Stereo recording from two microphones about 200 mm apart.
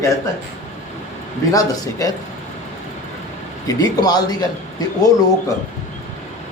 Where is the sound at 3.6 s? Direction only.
20° left (ahead or behind).